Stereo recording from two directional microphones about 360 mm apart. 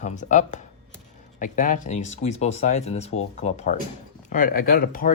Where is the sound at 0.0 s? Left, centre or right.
Left.